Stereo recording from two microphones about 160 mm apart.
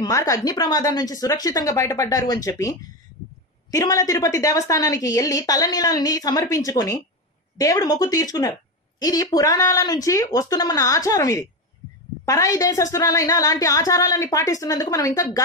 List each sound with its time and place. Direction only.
0.0 s a woman's voice: 20° left (ahead or behind)
3.7 s a woman's voice: 20° left (ahead or behind)